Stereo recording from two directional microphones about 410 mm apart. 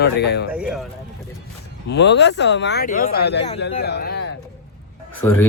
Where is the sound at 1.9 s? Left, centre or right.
Left.